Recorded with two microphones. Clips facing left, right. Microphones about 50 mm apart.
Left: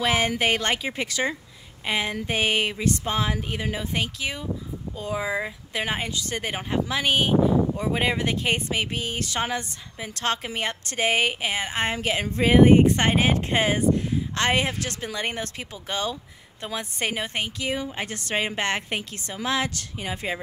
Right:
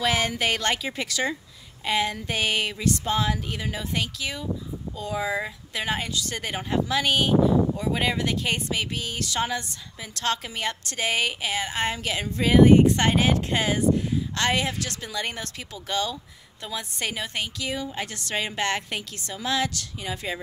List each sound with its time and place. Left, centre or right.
0.0 s speech: centre